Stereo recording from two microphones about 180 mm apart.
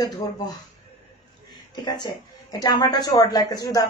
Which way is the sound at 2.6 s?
20° left (ahead or behind).